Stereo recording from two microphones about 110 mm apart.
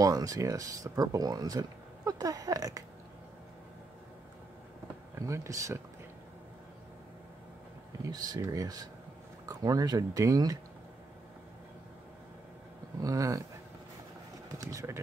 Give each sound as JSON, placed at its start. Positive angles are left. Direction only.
{"t": 0.0, "sound": "speech", "side_deg": -35}
{"t": 5.1, "sound": "speech", "side_deg": -25}
{"t": 8.0, "sound": "speech", "side_deg": -35}
{"t": 13.0, "sound": "speech", "side_deg": -30}
{"t": 14.6, "sound": "speech", "side_deg": -30}